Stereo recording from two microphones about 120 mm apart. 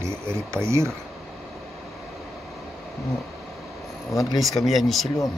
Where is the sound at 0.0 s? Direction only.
20° right (ahead or behind).